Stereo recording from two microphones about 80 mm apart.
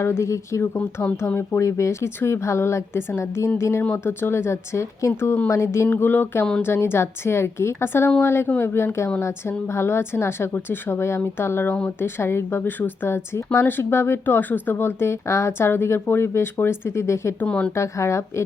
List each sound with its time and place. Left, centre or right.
0.0 s a woman's voice: left
5.9 s a sound: left
6.6 s a woman's voice: left
11.2 s a sound: left
11.9 s a woman's voice: left
17.4 s speech: centre
17.7 s a woman's voice: left